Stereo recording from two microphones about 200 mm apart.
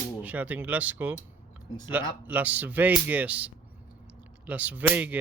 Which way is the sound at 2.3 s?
10° right (ahead or behind).